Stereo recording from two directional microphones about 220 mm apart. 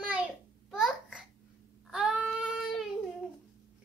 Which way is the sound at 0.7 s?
Centre (ahead or behind).